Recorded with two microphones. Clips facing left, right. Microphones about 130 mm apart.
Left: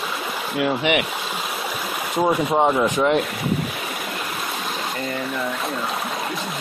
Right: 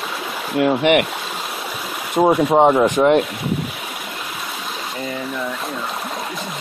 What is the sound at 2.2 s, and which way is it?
Speech, 20° right (ahead or behind).